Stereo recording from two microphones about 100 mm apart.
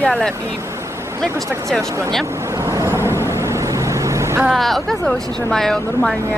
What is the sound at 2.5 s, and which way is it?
Vehicle, 30° right (ahead or behind).